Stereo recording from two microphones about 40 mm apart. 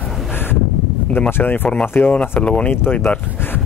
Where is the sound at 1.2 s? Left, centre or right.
Left.